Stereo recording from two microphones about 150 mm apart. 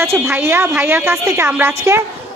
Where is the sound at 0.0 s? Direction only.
15° right (ahead or behind).